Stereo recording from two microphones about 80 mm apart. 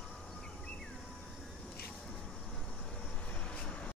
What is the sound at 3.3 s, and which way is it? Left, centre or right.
Vehicle, centre.